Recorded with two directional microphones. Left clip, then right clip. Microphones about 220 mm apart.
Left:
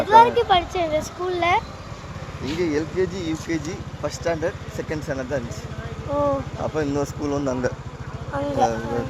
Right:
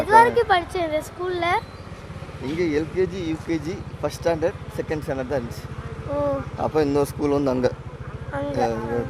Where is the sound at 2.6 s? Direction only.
15° right (ahead or behind).